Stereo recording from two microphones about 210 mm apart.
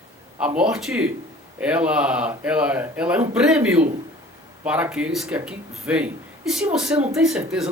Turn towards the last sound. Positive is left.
turn(degrees=-5)  # may be behind; listen again after turning